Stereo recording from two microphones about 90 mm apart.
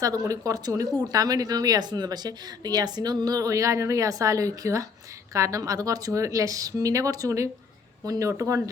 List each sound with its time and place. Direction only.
0.0 s speech: 40° right (ahead or behind)